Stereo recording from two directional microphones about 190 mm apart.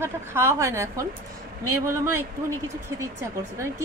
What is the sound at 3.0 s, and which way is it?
Speech, 15° right (ahead or behind).